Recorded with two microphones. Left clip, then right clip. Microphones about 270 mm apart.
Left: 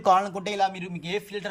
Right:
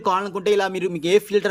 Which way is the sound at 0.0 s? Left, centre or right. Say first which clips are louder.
Even; centre.